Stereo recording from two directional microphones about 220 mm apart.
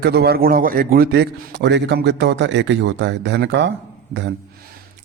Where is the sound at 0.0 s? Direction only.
45° right (ahead or behind).